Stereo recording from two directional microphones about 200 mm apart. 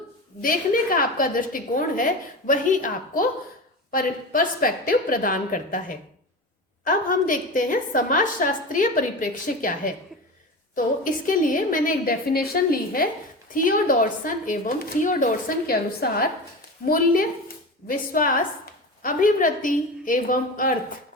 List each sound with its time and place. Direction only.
0.4 s a woman's voice: 45° left (ahead or behind)